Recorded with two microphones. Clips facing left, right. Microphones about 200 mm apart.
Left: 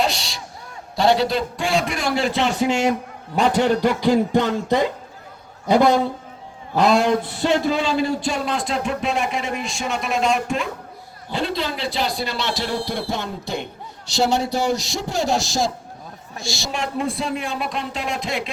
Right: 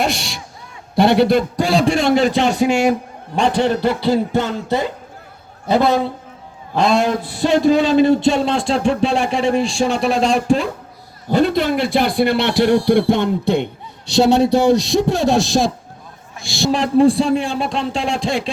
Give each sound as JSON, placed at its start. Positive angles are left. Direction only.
{"t": 0.0, "sound": "speech", "side_deg": -55}
{"t": 1.5, "sound": "a man's voice", "side_deg": -35}
{"t": 3.8, "sound": "a sound", "side_deg": 15}
{"t": 7.2, "sound": "speech", "side_deg": -10}
{"t": 11.3, "sound": "speech", "side_deg": -45}
{"t": 16.7, "sound": "a man's voice", "side_deg": -35}